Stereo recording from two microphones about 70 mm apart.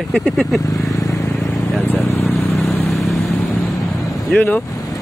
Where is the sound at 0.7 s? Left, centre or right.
Left.